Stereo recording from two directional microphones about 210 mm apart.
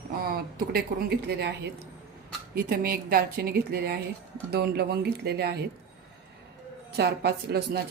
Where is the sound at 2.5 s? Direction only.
45° right (ahead or behind).